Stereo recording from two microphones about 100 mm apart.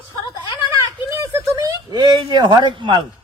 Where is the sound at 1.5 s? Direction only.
45° right (ahead or behind).